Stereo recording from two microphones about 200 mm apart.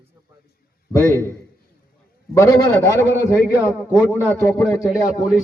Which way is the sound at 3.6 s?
10° left (ahead or behind).